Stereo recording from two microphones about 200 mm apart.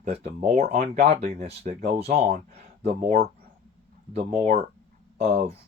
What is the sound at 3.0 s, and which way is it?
Speech, 45° right (ahead or behind).